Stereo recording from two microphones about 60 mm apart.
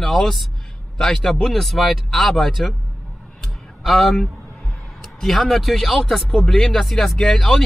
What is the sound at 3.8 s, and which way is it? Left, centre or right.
Speech, centre.